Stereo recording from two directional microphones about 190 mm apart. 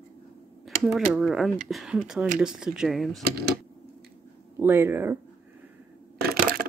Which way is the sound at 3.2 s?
55° right (ahead or behind).